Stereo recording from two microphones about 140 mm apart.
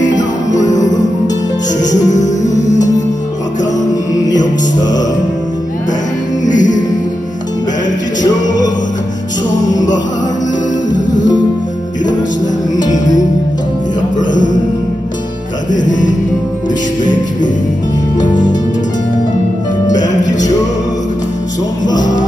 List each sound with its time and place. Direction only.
0.7 s music: 25° left (ahead or behind)
6.4 s music: 65° left (ahead or behind)
12.7 s music: 25° left (ahead or behind)
14.1 s music: 65° left (ahead or behind)
15.7 s music: 65° left (ahead or behind)
19.9 s music: 30° left (ahead or behind)